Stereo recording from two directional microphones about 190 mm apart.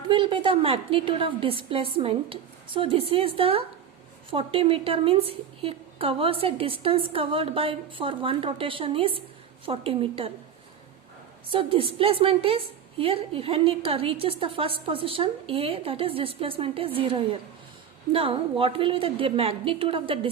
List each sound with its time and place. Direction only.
0.1 s a woman's voice: 25° right (ahead or behind)
11.5 s a woman's voice: 30° right (ahead or behind)